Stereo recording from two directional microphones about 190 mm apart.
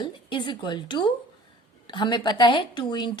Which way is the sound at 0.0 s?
25° left (ahead or behind).